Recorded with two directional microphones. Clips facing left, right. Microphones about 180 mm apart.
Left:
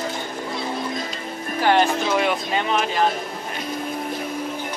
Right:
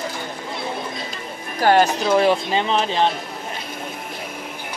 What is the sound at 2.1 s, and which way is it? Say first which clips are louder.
Speech: right 4 dB; 30° right (ahead or behind).